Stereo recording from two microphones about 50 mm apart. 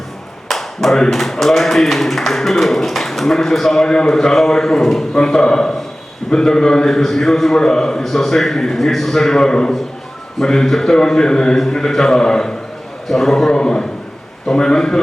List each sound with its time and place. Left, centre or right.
0.4 s clapping: centre
1.1 s a man's voice: centre
13.5 s speech: centre